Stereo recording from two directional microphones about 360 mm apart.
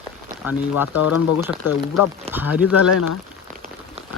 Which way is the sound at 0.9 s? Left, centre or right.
Left.